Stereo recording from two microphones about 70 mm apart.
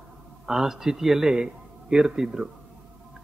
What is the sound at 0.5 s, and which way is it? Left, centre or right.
A man's voice, centre.